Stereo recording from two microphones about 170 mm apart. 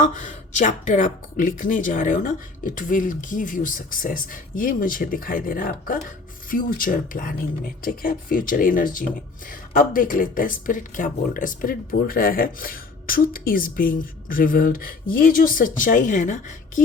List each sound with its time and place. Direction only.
0.0 s a woman's voice: 50° left (ahead or behind)